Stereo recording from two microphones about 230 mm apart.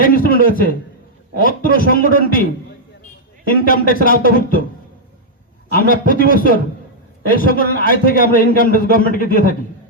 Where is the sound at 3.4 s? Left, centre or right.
Left.